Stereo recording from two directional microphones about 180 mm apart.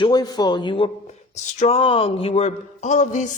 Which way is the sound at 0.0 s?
25° left (ahead or behind).